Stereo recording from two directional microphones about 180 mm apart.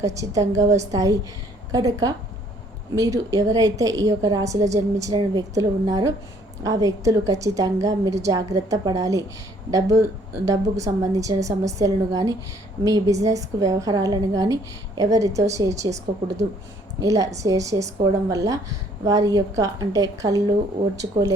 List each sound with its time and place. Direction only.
0.0 s a woman's voice: 20° right (ahead or behind)
17.0 s a woman's voice: 20° right (ahead or behind)